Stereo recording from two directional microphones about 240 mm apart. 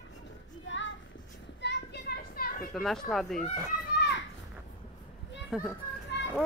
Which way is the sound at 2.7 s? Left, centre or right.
Centre.